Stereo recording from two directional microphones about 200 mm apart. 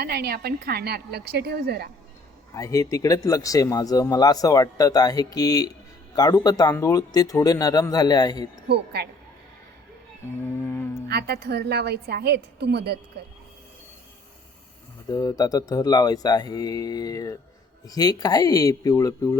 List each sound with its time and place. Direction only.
0.0 s a woman's voice: 50° right (ahead or behind)
2.6 s a man's voice: 15° left (ahead or behind)
8.6 s a woman's voice: 55° right (ahead or behind)
10.6 s a sound: 10° left (ahead or behind)
11.1 s a woman's voice: 55° right (ahead or behind)
15.1 s a man's voice: 20° left (ahead or behind)